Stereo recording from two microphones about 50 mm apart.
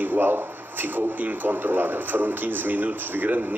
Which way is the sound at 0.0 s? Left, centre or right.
Right.